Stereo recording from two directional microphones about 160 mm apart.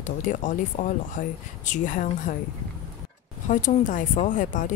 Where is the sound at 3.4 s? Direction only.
55° left (ahead or behind).